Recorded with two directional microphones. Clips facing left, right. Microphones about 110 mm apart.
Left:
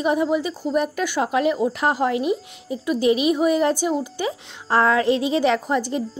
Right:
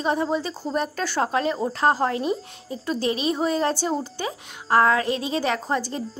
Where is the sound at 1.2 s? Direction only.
30° right (ahead or behind).